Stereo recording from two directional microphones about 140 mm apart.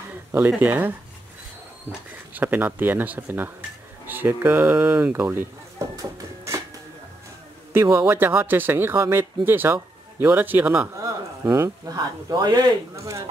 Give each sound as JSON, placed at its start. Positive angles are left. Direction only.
{"t": 0.5, "sound": "speech", "side_deg": -15}
{"t": 5.8, "sound": "music", "side_deg": -25}
{"t": 7.7, "sound": "speech", "side_deg": -15}